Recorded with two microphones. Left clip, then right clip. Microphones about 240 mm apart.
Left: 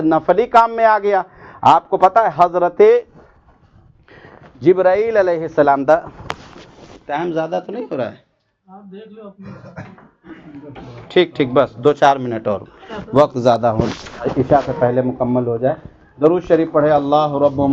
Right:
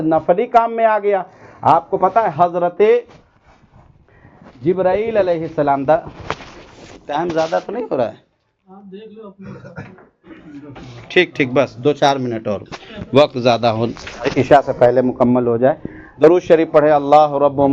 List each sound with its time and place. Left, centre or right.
0.1 s speech: left
4.6 s speech: left
6.6 s speech: centre
7.9 s speech: centre
11.1 s speech: centre
12.8 s speech: right
13.3 s speech: centre
14.5 s a man's voice: right